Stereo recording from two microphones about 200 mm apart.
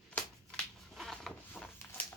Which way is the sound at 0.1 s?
5° left (ahead or behind).